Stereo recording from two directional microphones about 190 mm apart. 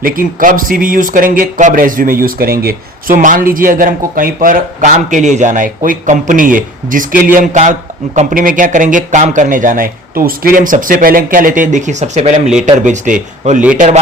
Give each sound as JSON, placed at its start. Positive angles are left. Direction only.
{"t": 0.0, "sound": "speech", "side_deg": -45}